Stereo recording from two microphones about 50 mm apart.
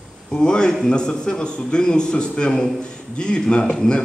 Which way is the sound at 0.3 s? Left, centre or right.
Centre.